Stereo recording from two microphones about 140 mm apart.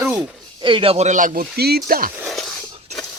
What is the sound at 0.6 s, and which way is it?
Speech, 40° right (ahead or behind).